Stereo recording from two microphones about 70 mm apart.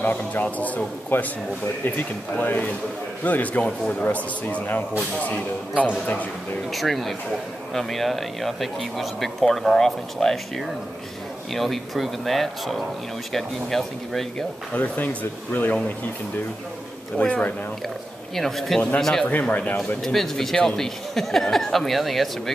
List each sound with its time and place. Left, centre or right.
0.0 s a man's voice: left
3.6 s speech: centre
4.1 s a man's voice: left
6.7 s speech: centre
11.5 s speech: centre
14.7 s a man's voice: left
17.2 s a man's voice: centre
18.3 s speech: centre
19.4 s a man's voice: centre
20.0 s speech: centre